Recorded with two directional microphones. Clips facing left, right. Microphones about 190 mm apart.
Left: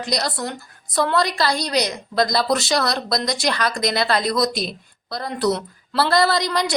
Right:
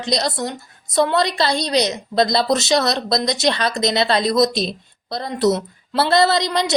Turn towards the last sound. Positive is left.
turn(degrees=-25)  # may be behind; listen again after turning